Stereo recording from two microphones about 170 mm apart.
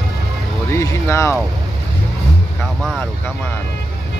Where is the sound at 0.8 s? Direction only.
15° left (ahead or behind).